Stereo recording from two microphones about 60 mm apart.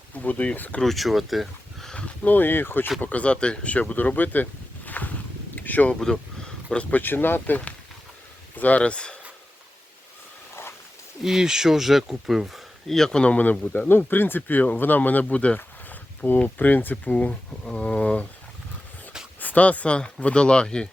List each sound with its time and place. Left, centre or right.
0.1 s speech: left
0.8 s speech: centre
2.2 s speech: left
3.0 s speech: left
4.9 s a sound: left
5.5 s speech: left
11.2 s speech: centre
13.0 s speech: centre
13.2 s speech: left
13.7 s speech: left; by 18.3 s centre
19.4 s speech: left